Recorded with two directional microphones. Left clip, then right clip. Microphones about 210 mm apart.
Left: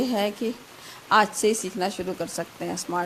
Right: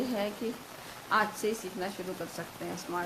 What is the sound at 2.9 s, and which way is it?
Speech, 40° left (ahead or behind).